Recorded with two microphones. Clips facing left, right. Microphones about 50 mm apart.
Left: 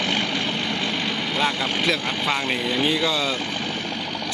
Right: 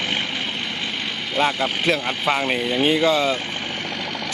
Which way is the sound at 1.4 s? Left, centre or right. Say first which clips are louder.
Right 4 dB; centre.